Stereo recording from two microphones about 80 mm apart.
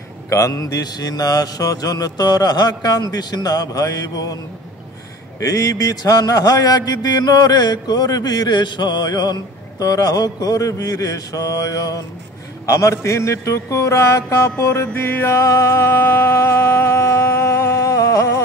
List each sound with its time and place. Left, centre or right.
0.3 s a man's voice: left
5.4 s a man's voice: left
12.6 s mantra: left
15.4 s a sound: left